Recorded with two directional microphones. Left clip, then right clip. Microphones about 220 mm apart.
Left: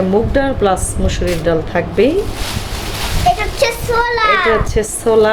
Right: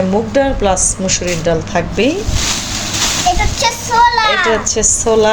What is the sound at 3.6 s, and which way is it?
Child singing, 15° left (ahead or behind).